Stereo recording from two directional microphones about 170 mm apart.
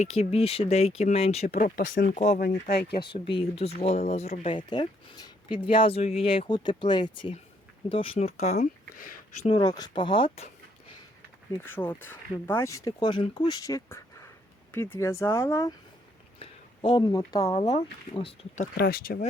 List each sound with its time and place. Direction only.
0.0 s speech: 40° left (ahead or behind)
1.5 s speech: 55° left (ahead or behind)
2.6 s speech: 70° left (ahead or behind)
3.0 s speech: 30° left (ahead or behind); by 9.5 s 55° left (ahead or behind)
9.5 s speech: 25° left (ahead or behind)
11.6 s speech: 10° left (ahead or behind)
16.4 s speech: 30° left (ahead or behind)
17.5 s speech: 35° left (ahead or behind)
18.5 s speech: 55° left (ahead or behind)